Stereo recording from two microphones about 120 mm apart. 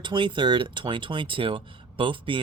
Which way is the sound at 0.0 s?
40° right (ahead or behind).